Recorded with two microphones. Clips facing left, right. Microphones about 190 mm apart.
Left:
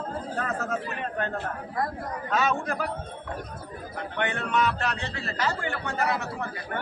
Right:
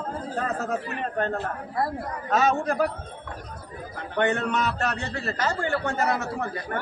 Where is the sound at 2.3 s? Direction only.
40° right (ahead or behind).